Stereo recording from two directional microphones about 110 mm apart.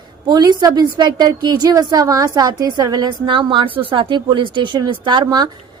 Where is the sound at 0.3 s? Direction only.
40° right (ahead or behind).